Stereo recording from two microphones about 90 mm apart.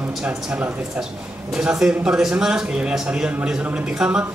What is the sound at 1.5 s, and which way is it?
Speech, 5° right (ahead or behind).